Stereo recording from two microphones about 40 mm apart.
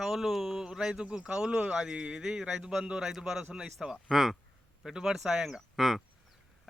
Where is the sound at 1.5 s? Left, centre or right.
Right; by 4.4 s centre.